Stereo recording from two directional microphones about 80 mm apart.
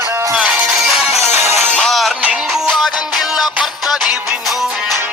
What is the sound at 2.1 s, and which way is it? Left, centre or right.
Music, centre.